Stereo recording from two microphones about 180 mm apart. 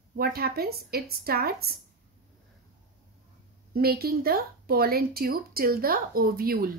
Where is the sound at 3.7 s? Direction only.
55° right (ahead or behind).